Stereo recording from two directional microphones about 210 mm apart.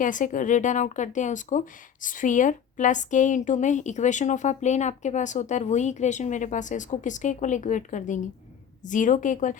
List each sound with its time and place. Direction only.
0.0 s a woman's voice: 40° left (ahead or behind)